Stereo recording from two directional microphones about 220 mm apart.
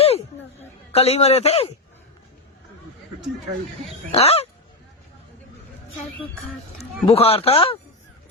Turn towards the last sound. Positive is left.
turn(degrees=25)  # may be behind; listen again after turning